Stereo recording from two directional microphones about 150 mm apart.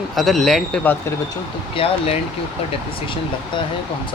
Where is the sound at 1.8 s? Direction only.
35° left (ahead or behind).